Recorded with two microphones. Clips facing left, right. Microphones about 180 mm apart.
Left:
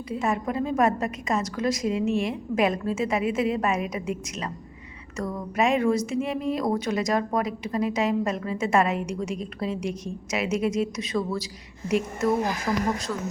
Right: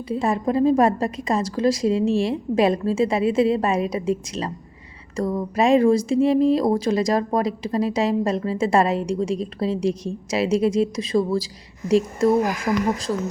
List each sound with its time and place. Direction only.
0.1 s speech: 30° right (ahead or behind)